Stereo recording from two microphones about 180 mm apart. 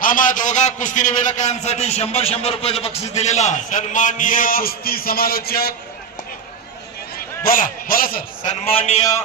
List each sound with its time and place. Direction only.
0.0 s a man's voice: 50° left (ahead or behind)
7.2 s a man's voice: 50° left (ahead or behind)
8.6 s a man's voice: 35° left (ahead or behind)